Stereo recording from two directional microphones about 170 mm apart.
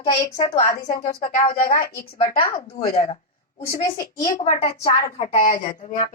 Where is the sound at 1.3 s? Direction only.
50° left (ahead or behind).